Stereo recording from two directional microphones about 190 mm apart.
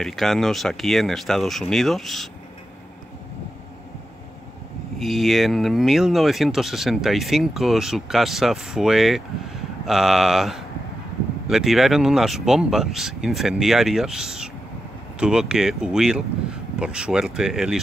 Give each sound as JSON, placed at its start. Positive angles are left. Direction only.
{"t": 0.0, "sound": "speech", "side_deg": 0}
{"t": 4.9, "sound": "speech", "side_deg": 0}